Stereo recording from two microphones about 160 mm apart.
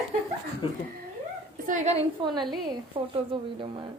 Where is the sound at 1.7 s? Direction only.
45° right (ahead or behind).